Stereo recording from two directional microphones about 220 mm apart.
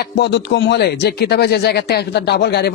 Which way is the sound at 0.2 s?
50° left (ahead or behind).